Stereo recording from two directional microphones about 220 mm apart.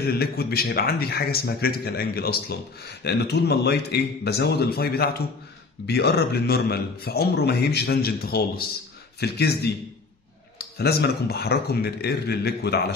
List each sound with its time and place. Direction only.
0.0 s a man's voice: 45° left (ahead or behind)